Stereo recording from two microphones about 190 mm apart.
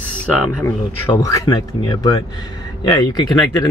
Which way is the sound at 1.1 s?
20° left (ahead or behind).